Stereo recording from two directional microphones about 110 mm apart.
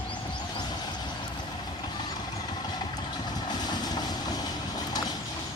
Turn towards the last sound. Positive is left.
turn(degrees=35)  # may be behind; listen again after turning